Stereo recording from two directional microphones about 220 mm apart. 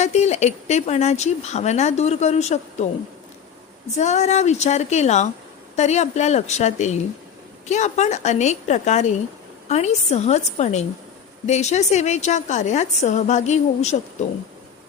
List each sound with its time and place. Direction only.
0.0 s speech: 30° left (ahead or behind)
3.9 s speech: 30° left (ahead or behind)